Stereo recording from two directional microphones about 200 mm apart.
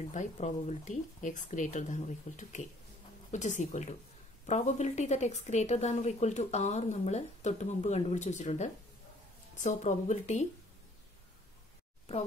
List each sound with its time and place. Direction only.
0.1 s a woman's voice: 35° left (ahead or behind)